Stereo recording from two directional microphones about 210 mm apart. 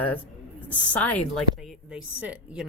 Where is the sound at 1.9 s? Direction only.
5° right (ahead or behind).